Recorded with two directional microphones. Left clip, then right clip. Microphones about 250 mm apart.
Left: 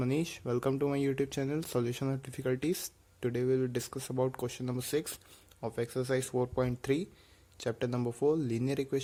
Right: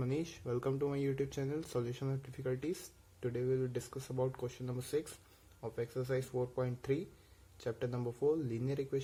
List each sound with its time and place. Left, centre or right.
0.0 s speech: left